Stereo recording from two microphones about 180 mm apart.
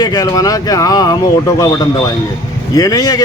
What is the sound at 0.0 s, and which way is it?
Speech, 20° left (ahead or behind).